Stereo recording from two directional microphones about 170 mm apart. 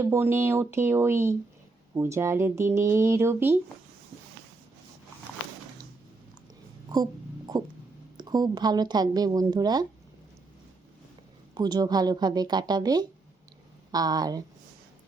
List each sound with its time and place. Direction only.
0.0 s speech: 15° right (ahead or behind)
6.9 s music: 25° right (ahead or behind)
8.2 s speech: 25° right (ahead or behind)
11.5 s speech: 25° right (ahead or behind)